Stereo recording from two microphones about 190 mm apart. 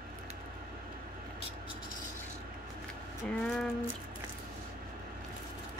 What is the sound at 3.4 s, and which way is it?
Speech, 5° left (ahead or behind).